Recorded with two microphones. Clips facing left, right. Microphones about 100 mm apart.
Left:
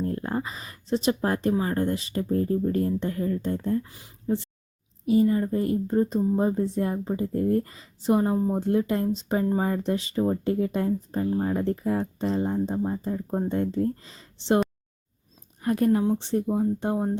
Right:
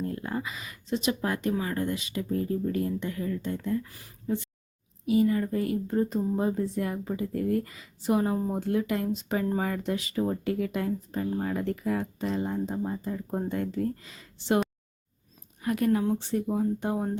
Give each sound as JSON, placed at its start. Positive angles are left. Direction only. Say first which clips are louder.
{"t": 0.0, "sound": "speech", "louder": "left 4 dB", "side_deg": 35}
{"t": 3.8, "sound": "speech", "louder": "left 4 dB", "side_deg": 20}
{"t": 15.6, "sound": "speech", "louder": "left 3 dB", "side_deg": 30}